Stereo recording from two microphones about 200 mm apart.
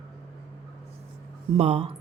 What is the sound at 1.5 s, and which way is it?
Speech, 30° right (ahead or behind).